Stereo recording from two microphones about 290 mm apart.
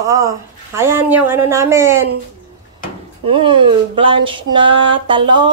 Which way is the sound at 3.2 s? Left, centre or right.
Centre.